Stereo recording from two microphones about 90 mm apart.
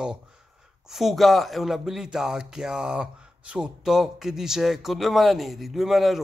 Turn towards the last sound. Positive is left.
turn(degrees=-5)  # may be behind; listen again after turning